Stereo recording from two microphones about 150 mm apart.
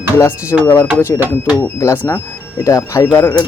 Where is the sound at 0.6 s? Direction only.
15° left (ahead or behind).